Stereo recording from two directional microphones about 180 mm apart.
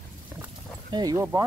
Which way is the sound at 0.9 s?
20° right (ahead or behind).